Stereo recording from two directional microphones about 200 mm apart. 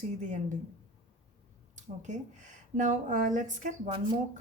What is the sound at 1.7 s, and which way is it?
A woman's voice, 35° right (ahead or behind).